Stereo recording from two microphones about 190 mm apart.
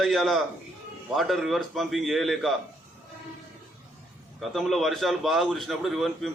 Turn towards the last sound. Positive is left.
turn(degrees=0)  # may be behind; listen again after turning